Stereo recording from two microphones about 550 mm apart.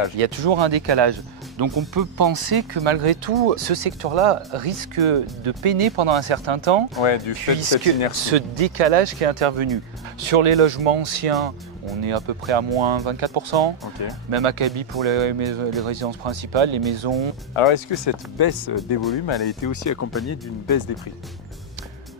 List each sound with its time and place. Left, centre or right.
0.2 s speech: right
1.6 s speech: right
7.0 s speech: left
7.5 s speech: right
12.0 s speech: right
17.6 s speech: left